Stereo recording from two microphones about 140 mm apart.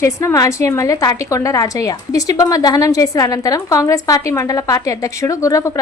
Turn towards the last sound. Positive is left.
turn(degrees=25)  # may be behind; listen again after turning